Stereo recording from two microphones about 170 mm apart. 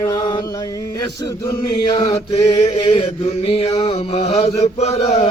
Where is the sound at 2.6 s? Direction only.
40° left (ahead or behind).